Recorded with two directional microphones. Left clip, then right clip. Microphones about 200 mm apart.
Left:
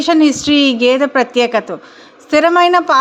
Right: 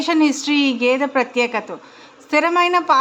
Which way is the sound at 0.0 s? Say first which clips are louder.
Left 6 dB; 20° left (ahead or behind).